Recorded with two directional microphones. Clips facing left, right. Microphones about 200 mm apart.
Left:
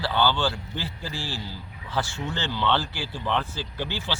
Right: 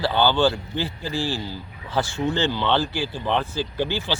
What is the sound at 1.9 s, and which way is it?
Speech, 20° right (ahead or behind).